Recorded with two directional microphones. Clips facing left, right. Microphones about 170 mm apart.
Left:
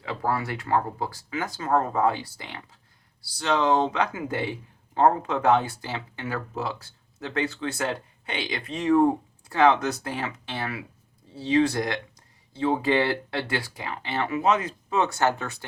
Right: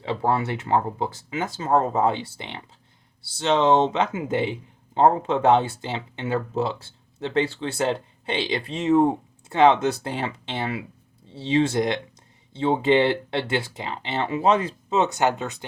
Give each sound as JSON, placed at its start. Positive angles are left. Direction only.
{"t": 0.0, "sound": "speech", "side_deg": -25}